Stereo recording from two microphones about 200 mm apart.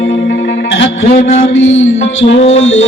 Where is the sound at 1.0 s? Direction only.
35° left (ahead or behind).